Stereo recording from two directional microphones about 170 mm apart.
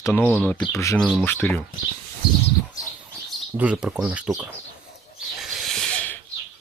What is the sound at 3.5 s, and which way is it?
Speech, 5° right (ahead or behind).